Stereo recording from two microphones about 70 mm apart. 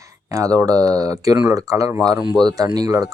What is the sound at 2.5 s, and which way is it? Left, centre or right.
Speech, right.